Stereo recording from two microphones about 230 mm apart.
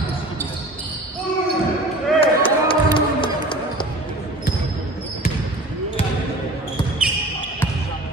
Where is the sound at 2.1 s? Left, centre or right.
Left.